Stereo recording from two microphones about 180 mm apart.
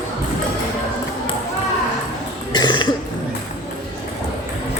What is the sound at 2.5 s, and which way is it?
Cough, 25° left (ahead or behind).